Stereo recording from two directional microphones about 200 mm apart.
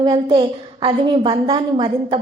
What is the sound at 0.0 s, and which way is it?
A woman's voice, 25° right (ahead or behind).